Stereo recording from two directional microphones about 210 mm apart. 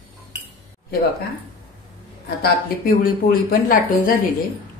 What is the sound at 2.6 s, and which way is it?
Speech, 45° left (ahead or behind).